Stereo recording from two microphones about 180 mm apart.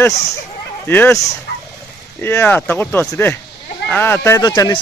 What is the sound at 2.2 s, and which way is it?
Speech, 10° left (ahead or behind).